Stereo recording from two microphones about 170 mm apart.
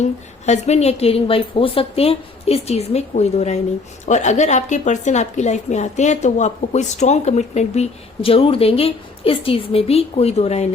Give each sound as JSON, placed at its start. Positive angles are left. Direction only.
{"t": 0.0, "sound": "a woman's voice", "side_deg": 40}